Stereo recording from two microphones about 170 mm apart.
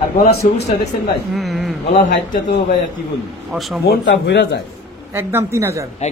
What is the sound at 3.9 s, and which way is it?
Speech, 90° left.